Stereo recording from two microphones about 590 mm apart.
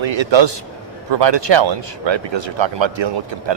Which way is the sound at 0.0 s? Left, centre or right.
Right.